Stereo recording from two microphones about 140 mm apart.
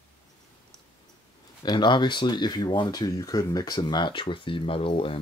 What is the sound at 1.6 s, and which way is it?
Speech, 30° left (ahead or behind).